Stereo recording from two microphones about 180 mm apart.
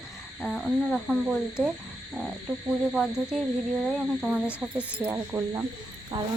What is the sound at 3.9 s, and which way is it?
Speech, centre (ahead or behind).